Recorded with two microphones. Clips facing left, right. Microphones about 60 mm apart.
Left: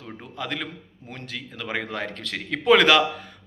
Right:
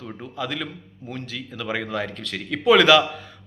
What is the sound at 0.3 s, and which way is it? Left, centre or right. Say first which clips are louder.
A man's voice: right 2 dB; left.